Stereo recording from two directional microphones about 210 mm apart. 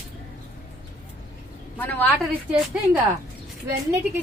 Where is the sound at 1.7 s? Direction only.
10° left (ahead or behind).